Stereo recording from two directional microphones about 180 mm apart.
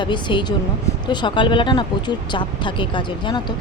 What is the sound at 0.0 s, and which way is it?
Speech, 25° left (ahead or behind).